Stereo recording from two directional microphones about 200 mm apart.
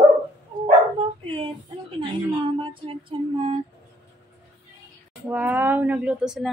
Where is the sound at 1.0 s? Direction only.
25° right (ahead or behind).